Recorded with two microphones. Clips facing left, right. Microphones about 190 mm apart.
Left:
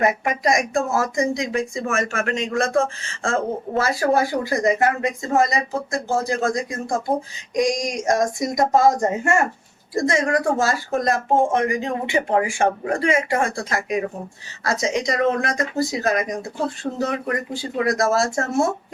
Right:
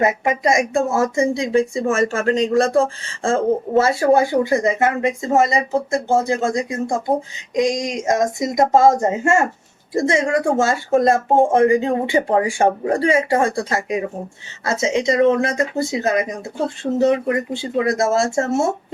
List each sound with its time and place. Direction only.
0.0 s speech: 25° right (ahead or behind)